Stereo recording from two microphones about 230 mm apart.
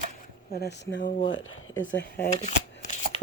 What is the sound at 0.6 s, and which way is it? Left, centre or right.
Speech, left.